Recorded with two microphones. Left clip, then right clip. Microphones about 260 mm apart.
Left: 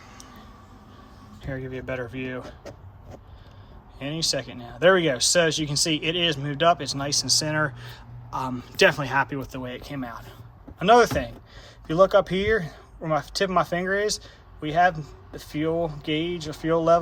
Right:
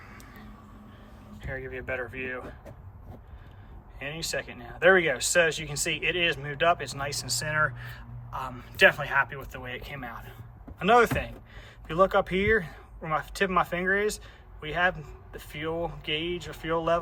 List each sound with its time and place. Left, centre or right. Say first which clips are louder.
1.9 s speech: left 1 dB; centre
3.9 s speech: left 6 dB; centre